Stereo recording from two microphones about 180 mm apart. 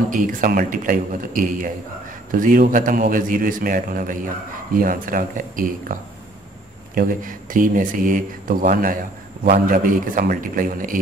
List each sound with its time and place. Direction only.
0.1 s speech: 50° right (ahead or behind)
7.0 s speech: 50° right (ahead or behind)